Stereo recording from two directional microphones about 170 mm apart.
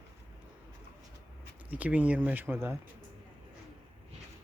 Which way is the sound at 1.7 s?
10° right (ahead or behind).